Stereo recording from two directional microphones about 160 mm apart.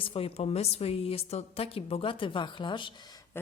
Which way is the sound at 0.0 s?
35° left (ahead or behind).